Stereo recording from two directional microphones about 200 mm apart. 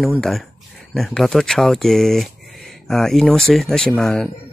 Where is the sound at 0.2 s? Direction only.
Centre (ahead or behind).